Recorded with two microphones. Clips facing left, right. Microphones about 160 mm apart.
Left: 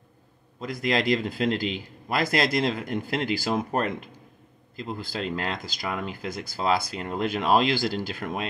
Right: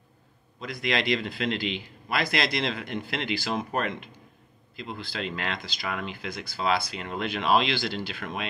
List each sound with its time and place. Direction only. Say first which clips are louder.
0.7 s speech: left 3 dB; 40° left (ahead or behind)